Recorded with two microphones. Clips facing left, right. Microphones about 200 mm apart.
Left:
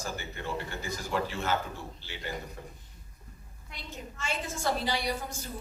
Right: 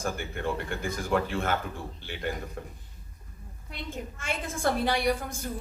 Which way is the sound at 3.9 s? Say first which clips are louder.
Right 1 dB; 55° right (ahead or behind).